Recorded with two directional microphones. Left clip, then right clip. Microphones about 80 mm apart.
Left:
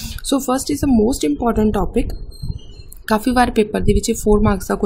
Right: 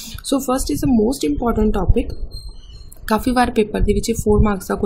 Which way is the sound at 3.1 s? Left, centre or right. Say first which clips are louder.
Left 1 dB; left.